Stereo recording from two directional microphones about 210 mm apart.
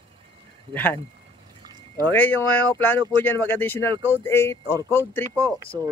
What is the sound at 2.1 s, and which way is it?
Speech, 10° left (ahead or behind).